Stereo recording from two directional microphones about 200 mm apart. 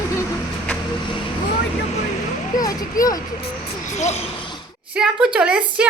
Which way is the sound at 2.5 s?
20° left (ahead or behind).